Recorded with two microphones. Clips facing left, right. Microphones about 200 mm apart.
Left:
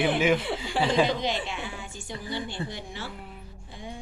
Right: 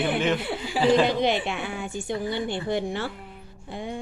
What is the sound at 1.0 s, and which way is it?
A woman's voice, 60° right (ahead or behind).